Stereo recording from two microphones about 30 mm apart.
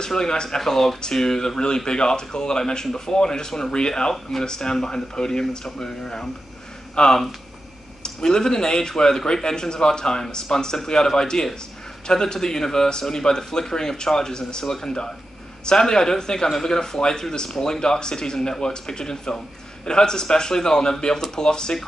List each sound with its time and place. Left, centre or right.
0.0 s speech: left
0.6 s speech: centre; by 4.1 s left
4.1 s speech: centre
4.5 s speech: left
5.9 s speech: centre
7.0 s speech: left